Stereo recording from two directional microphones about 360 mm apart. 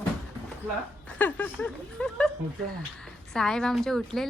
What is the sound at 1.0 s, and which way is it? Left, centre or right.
A woman's voice, centre.